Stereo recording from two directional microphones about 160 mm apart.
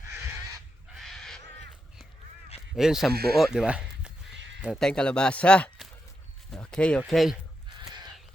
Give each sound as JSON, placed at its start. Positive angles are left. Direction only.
{"t": 0.9, "sound": "a sound", "side_deg": 0}
{"t": 2.7, "sound": "speech", "side_deg": -5}
{"t": 3.1, "sound": "speech", "side_deg": -75}
{"t": 3.3, "sound": "speech", "side_deg": -5}
{"t": 6.5, "sound": "a sound", "side_deg": 5}
{"t": 7.1, "sound": "speech", "side_deg": 0}